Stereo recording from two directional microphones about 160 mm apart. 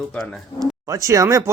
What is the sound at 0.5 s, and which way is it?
Speech, 20° right (ahead or behind).